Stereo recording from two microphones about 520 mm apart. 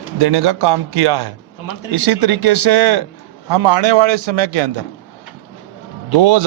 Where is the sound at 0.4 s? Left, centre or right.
Right.